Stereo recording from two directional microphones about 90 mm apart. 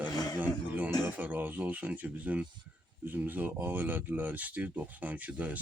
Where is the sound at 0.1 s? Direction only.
45° left (ahead or behind).